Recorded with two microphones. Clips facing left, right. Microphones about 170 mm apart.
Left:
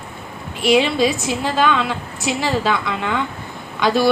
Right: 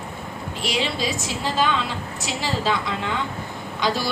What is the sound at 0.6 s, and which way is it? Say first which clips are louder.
A woman's voice: left 10 dB; 60° left (ahead or behind).